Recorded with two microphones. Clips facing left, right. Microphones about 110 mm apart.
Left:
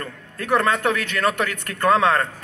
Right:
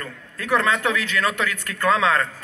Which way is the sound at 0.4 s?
50° left (ahead or behind).